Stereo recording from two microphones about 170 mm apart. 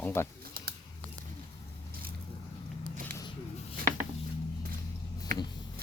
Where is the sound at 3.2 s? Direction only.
30° left (ahead or behind).